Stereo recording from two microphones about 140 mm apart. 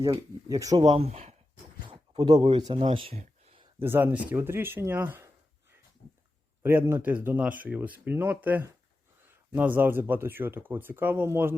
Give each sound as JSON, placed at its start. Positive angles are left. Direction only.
{"t": 0.2, "sound": "speech", "side_deg": -25}
{"t": 0.9, "sound": "speech", "side_deg": -50}
{"t": 1.9, "sound": "speech", "side_deg": -30}
{"t": 3.8, "sound": "speech", "side_deg": -15}
{"t": 6.6, "sound": "speech", "side_deg": -15}